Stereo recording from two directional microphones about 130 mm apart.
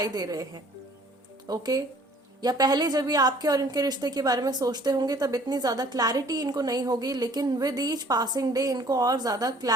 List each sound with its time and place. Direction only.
0.0 s a woman's voice: 30° right (ahead or behind)